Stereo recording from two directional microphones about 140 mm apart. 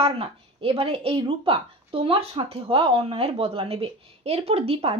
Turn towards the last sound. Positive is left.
turn(degrees=-45)  # may be behind; listen again after turning